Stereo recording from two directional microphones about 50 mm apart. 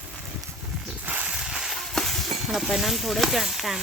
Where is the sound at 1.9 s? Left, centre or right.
Centre.